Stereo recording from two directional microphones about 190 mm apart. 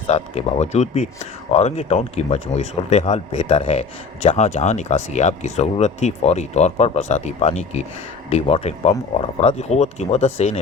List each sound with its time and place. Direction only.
0.1 s speech: 35° left (ahead or behind)